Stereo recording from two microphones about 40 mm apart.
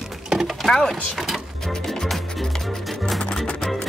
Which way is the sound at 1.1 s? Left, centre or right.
Centre.